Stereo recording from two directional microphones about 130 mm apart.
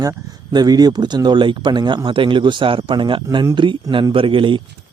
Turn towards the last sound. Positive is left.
turn(degrees=-40)  # may be behind; listen again after turning